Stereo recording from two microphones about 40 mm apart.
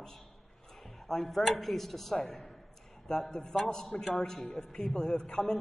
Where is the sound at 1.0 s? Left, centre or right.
Centre.